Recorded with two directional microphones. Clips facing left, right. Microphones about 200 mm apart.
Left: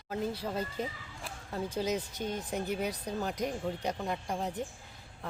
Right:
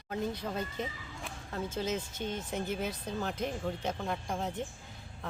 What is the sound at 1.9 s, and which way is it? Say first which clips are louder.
Speech: left 1 dB; 35° left (ahead or behind).